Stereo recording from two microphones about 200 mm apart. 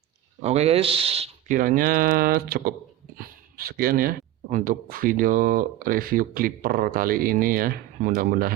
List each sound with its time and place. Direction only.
0.4 s speech: 30° right (ahead or behind)